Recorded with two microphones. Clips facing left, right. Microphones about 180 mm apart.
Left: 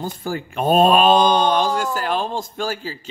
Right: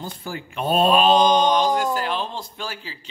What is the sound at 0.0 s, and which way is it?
Speech, 45° left (ahead or behind).